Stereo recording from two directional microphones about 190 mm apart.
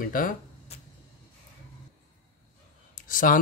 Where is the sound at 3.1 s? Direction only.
45° left (ahead or behind).